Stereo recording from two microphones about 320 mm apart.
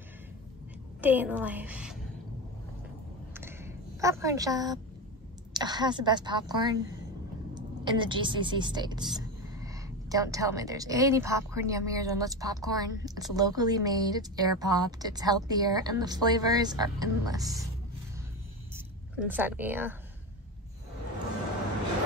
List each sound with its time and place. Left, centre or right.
1.0 s a woman's voice: centre
3.3 s a sound: centre
5.5 s a woman's voice: centre
19.1 s a woman's voice: centre